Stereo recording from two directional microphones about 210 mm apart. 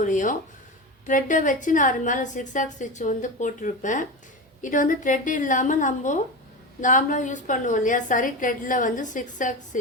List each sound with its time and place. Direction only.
0.0 s a woman's voice: 35° left (ahead or behind)